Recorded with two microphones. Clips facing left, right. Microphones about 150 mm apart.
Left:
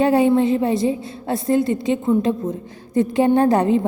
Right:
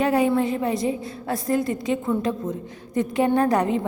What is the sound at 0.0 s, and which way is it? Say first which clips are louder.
A woman's voice: left 5 dB; 25° left (ahead or behind).